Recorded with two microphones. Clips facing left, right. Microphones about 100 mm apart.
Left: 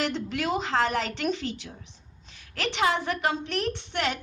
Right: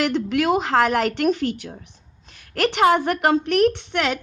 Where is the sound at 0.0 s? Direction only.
70° right (ahead or behind).